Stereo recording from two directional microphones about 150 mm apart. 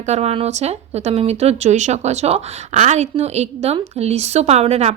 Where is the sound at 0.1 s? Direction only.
45° right (ahead or behind).